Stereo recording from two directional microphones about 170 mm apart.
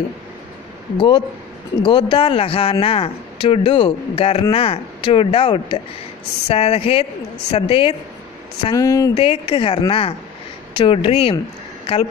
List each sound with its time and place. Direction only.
0.9 s speech: 30° left (ahead or behind)
8.7 s speech: 20° left (ahead or behind)
9.1 s speech: 30° left (ahead or behind)